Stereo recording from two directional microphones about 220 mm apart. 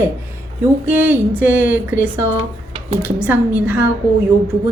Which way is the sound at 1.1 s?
5° right (ahead or behind).